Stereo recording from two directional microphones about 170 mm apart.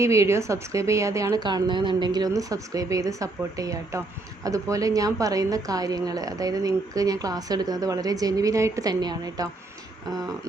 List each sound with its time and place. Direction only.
0.0 s a woman's voice: 15° right (ahead or behind)